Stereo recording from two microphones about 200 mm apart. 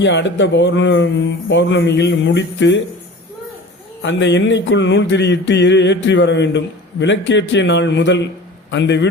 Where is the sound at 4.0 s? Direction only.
65° left (ahead or behind).